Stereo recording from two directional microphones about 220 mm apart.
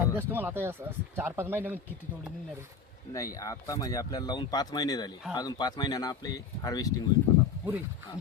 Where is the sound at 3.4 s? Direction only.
15° left (ahead or behind).